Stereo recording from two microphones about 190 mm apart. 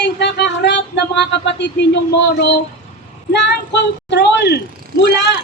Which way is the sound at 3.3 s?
65° left (ahead or behind).